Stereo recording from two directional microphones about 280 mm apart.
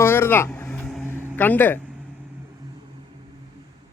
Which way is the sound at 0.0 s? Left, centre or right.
Centre.